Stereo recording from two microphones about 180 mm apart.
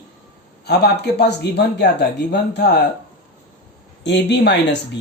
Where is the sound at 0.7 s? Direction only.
65° left (ahead or behind).